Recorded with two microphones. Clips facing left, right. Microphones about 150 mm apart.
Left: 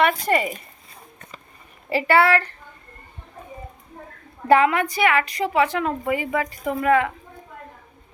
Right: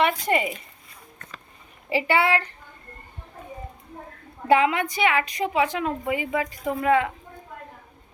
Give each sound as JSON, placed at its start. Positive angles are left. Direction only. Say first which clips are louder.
{"t": 0.0, "sound": "speech", "louder": "left 2 dB", "side_deg": -15}
{"t": 1.9, "sound": "a woman's voice", "louder": "left 4 dB", "side_deg": -15}
{"t": 4.4, "sound": "a woman's voice", "louder": "left 3 dB", "side_deg": -15}